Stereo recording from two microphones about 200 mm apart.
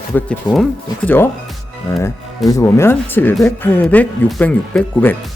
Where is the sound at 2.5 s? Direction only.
15° left (ahead or behind).